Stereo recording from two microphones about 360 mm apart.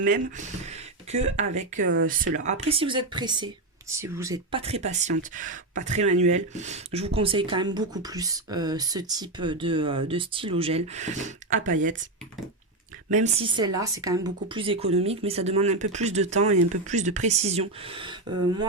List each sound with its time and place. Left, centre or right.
0.0 s speech: right
13.1 s speech: centre
16.5 s speech: right
16.9 s speech: centre